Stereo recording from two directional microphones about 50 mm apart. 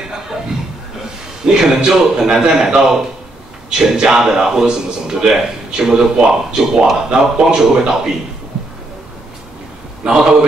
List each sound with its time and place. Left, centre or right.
1.4 s a man's voice: centre
10.0 s a man's voice: centre